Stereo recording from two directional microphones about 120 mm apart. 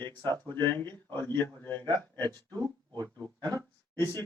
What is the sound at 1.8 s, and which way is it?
Speech, 35° right (ahead or behind).